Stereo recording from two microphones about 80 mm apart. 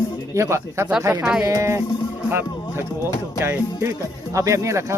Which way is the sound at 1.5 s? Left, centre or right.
Right.